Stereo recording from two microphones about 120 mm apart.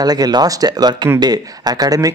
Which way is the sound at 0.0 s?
35° right (ahead or behind).